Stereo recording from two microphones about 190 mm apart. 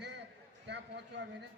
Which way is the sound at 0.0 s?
65° right (ahead or behind).